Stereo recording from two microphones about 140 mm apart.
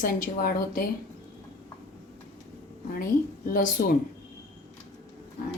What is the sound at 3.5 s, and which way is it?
Speech, 85° left.